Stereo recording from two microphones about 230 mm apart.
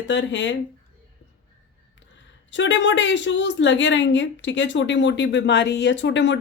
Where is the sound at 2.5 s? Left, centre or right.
Left.